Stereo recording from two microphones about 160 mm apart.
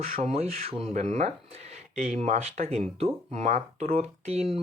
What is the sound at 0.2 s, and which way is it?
Speech, 40° right (ahead or behind).